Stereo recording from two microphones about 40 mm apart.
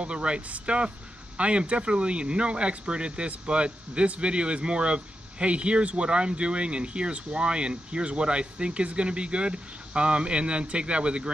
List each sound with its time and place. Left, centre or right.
0.0 s speech: right